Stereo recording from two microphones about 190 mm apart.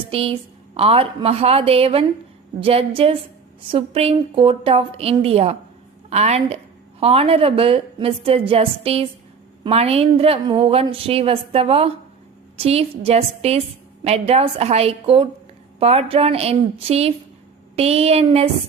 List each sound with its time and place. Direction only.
0.1 s a woman's voice: 30° right (ahead or behind)